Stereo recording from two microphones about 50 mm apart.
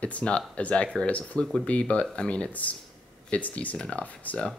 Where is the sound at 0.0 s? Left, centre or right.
Left.